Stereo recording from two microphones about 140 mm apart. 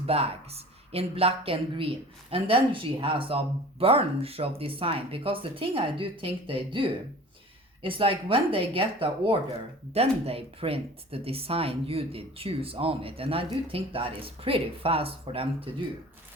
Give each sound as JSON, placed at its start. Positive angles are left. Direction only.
{"t": 0.0, "sound": "a woman's voice", "side_deg": -45}